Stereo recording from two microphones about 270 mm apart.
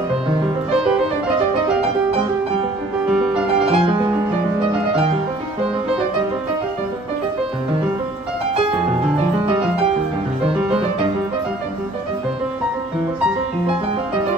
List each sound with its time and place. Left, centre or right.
3.1 s music: centre
3.6 s music: right